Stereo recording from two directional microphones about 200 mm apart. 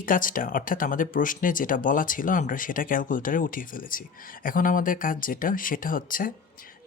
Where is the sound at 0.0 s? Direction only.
45° left (ahead or behind).